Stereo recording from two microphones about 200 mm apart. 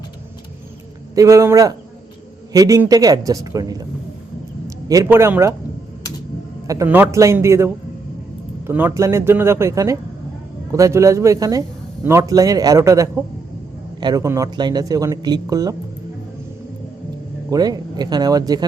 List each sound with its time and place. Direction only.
1.1 s a man's voice: 15° right (ahead or behind)
4.9 s a man's voice: 15° right (ahead or behind)
6.7 s a man's voice: 10° right (ahead or behind)
17.5 s speech: 20° right (ahead or behind)